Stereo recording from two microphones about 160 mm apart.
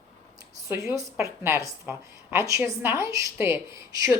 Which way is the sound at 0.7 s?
20° right (ahead or behind).